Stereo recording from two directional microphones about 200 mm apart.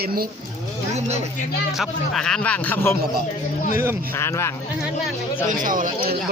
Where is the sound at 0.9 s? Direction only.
35° right (ahead or behind).